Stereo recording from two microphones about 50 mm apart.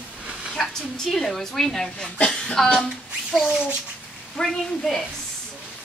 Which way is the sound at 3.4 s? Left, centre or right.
Centre.